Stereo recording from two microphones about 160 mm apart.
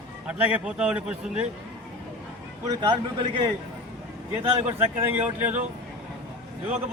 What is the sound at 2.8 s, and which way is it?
Speech, 30° right (ahead or behind).